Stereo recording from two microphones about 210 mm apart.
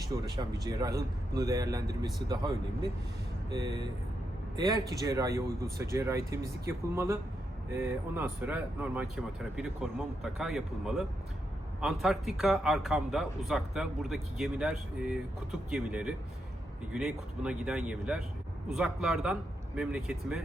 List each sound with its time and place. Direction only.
0.3 s speech: 20° right (ahead or behind)
3.5 s speech: 20° right (ahead or behind); by 20.4 s 5° right (ahead or behind)